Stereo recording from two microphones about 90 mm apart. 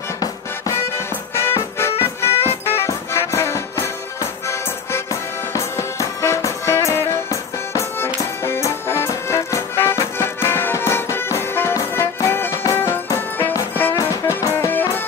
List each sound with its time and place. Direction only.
0.2 s music: 30° left (ahead or behind)
5.5 s music: 35° left (ahead or behind)